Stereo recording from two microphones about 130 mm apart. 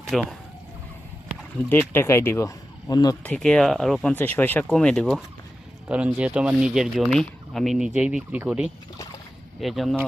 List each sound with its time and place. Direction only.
0.1 s speech: centre (ahead or behind)
1.9 s speech: 20° left (ahead or behind)
3.2 s speech: 5° left (ahead or behind)
4.1 s speech: 15° left (ahead or behind)
5.9 s speech: 10° right (ahead or behind)
7.9 s speech: 10° right (ahead or behind)